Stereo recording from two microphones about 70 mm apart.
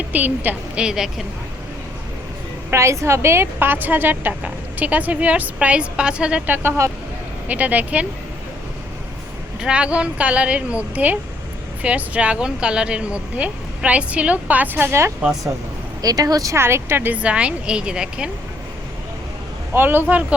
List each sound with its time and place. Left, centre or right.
0.1 s a woman's voice: right
0.8 s a woman's voice: centre
2.6 s a woman's voice: right; by 6.4 s centre
6.6 s speech: right
7.4 s a woman's voice: right
9.6 s a woman's voice: centre; by 15.1 s right
16.0 s speech: right
16.6 s speech: right
17.2 s a woman's voice: centre
19.7 s a woman's voice: right